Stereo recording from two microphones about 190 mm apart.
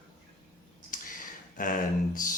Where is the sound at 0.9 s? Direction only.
45° left (ahead or behind).